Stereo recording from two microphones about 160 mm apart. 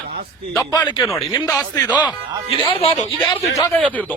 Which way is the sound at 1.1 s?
25° left (ahead or behind).